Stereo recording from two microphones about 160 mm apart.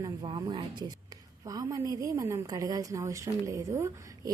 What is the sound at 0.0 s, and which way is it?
A woman's voice, 25° right (ahead or behind).